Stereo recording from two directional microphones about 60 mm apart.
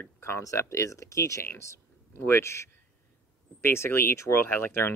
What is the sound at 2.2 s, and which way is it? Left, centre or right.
Speech, left.